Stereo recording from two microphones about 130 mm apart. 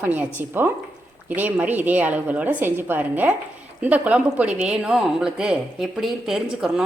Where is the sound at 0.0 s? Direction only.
15° right (ahead or behind).